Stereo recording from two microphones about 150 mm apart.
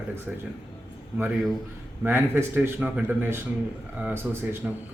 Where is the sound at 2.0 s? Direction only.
15° right (ahead or behind).